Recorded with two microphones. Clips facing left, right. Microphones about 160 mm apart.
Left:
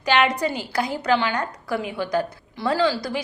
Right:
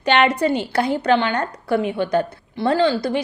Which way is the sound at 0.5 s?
25° right (ahead or behind).